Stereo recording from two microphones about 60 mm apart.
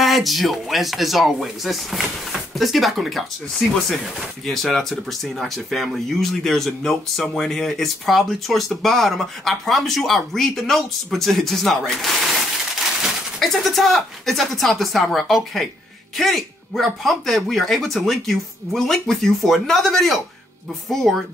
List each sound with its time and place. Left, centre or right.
0.0 s speech: centre